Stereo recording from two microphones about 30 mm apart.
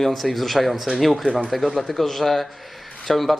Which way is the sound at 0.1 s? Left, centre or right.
Centre.